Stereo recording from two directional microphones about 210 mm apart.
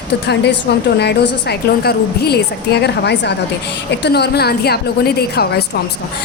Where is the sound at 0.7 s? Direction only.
50° left (ahead or behind).